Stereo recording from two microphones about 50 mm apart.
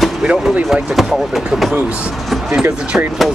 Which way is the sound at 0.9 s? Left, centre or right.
Centre.